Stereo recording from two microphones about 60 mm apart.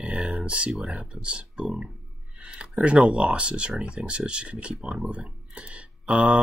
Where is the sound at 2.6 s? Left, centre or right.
Centre.